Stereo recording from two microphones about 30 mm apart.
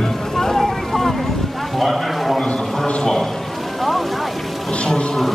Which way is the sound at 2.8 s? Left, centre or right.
Left.